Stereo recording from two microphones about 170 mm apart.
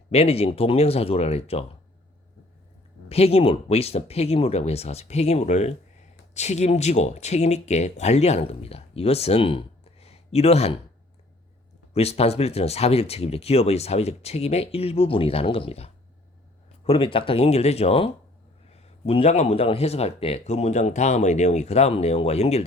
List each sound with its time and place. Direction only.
0.1 s speech: 35° left (ahead or behind)
3.1 s speech: 35° left (ahead or behind)
11.9 s speech: 35° left (ahead or behind)